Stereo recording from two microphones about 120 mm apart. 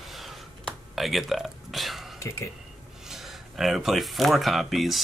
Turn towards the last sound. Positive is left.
turn(degrees=0)  # may be behind; listen again after turning